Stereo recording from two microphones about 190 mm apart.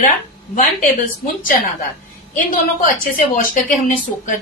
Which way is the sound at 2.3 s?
45° left (ahead or behind).